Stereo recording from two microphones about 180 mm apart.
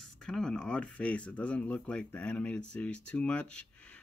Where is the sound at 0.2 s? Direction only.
5° left (ahead or behind).